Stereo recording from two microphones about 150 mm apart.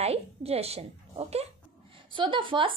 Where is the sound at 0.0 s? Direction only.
45° right (ahead or behind).